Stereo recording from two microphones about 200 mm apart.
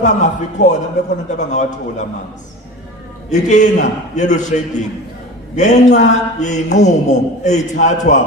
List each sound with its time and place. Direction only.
0.0 s a man's voice: 35° left (ahead or behind)
3.2 s a man's voice: 35° left (ahead or behind)